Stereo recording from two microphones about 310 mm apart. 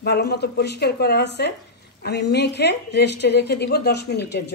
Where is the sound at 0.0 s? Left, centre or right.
Left.